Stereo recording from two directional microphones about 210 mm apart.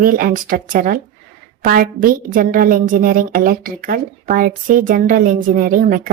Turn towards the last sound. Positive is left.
turn(degrees=-40)  # may be behind; listen again after turning